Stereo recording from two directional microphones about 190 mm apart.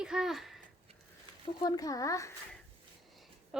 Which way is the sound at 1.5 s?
20° left (ahead or behind).